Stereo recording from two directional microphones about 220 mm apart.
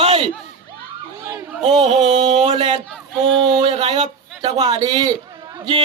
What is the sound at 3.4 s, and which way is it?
Speech, 25° right (ahead or behind).